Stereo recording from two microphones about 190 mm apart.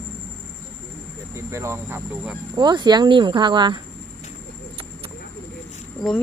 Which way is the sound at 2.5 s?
25° right (ahead or behind).